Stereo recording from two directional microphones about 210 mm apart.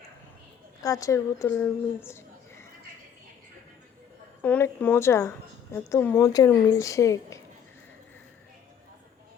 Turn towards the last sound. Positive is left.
turn(degrees=15)  # may be behind; listen again after turning